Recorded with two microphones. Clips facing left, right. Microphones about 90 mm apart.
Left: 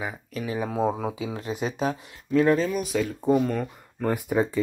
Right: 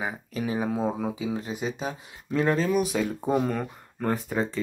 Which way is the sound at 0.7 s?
15° left (ahead or behind).